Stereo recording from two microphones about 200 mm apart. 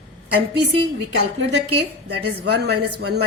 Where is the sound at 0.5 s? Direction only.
55° right (ahead or behind).